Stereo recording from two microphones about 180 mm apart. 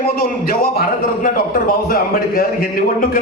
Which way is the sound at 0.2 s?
55° left (ahead or behind).